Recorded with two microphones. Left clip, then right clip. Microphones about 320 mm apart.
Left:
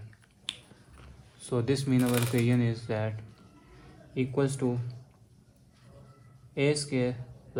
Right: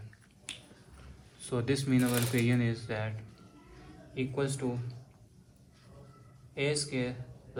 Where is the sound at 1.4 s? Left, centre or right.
Left.